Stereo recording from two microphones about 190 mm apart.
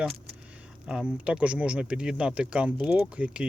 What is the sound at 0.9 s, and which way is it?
Speech, 5° right (ahead or behind).